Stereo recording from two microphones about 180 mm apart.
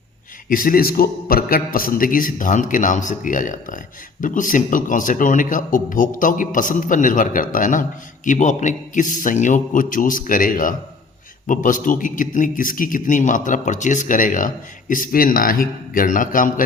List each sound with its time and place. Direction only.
0.4 s a man's voice: 50° left (ahead or behind)